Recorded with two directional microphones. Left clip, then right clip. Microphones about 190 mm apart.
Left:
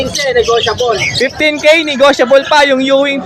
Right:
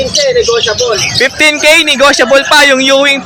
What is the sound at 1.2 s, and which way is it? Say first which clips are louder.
Speech: right 4 dB; 5° left (ahead or behind).